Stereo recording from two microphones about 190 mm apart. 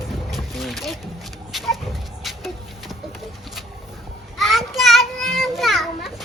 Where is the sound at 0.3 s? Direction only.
Centre (ahead or behind).